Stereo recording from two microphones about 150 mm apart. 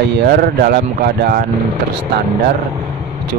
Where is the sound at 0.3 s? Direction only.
85° right.